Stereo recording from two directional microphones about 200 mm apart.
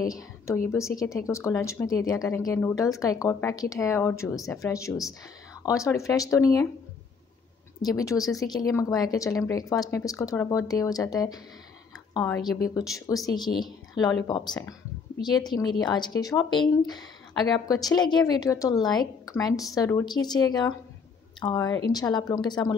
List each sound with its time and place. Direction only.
0.0 s a woman's voice: 15° left (ahead or behind)
7.8 s speech: 15° left (ahead or behind)
12.3 s a woman's voice: centre (ahead or behind)
12.7 s a woman's voice: 15° left (ahead or behind)